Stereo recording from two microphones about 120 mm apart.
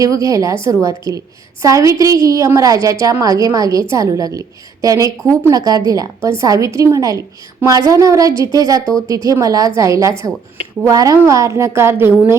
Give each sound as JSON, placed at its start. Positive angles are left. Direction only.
{"t": 0.0, "sound": "a woman's voice", "side_deg": -30}